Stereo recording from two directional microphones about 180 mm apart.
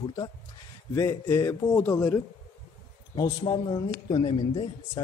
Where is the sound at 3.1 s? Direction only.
25° left (ahead or behind).